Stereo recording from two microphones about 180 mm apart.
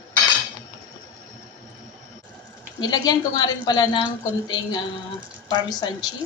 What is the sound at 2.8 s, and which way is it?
A woman's voice, 20° left (ahead or behind).